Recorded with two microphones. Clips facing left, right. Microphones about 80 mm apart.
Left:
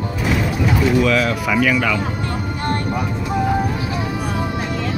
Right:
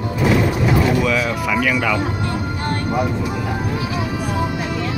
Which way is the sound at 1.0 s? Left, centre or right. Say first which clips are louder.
Left 2 dB; centre.